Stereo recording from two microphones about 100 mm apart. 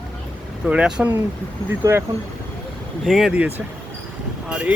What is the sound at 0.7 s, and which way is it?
Speech, 10° right (ahead or behind).